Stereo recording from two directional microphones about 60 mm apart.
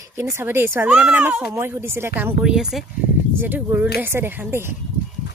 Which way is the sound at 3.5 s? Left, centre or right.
Right.